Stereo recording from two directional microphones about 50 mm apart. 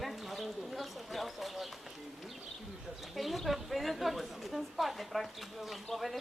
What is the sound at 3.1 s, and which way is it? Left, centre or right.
Speech, centre.